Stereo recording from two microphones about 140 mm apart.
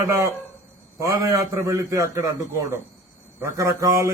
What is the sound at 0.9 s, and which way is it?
A man's voice, 20° right (ahead or behind).